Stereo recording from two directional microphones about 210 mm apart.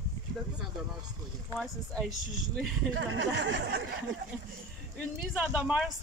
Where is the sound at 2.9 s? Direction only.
60° right (ahead or behind).